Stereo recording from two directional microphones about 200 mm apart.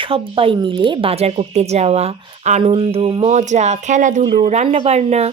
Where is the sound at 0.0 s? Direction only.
25° right (ahead or behind).